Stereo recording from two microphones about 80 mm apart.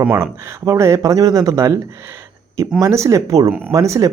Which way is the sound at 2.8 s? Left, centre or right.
Right.